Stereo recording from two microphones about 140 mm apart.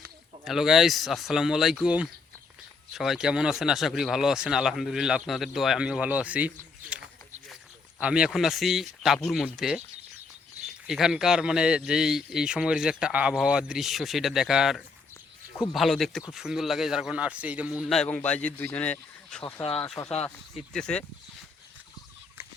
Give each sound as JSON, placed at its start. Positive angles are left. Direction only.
{"t": 0.4, "sound": "speech", "side_deg": 0}
{"t": 7.5, "sound": "speech", "side_deg": -5}
{"t": 10.8, "sound": "speech", "side_deg": -5}
{"t": 17.8, "sound": "speech", "side_deg": 5}
{"t": 20.0, "sound": "speech", "side_deg": 20}
{"t": 20.7, "sound": "speech", "side_deg": 5}